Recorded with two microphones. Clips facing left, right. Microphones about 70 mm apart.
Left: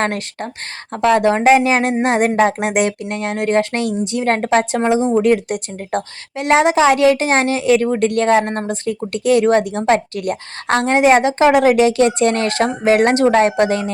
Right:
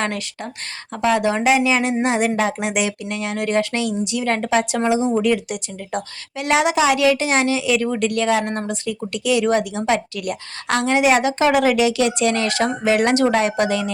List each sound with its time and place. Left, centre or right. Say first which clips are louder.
0.0 s a woman's voice: left 4 dB; left